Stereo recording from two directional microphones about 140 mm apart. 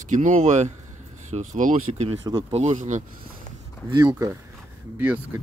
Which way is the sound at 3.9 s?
25° right (ahead or behind).